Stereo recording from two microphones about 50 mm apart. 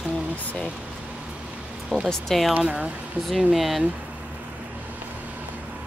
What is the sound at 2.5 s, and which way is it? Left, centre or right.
Speech, right.